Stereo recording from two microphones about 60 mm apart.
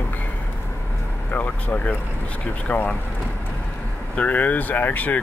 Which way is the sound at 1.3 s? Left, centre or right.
Left.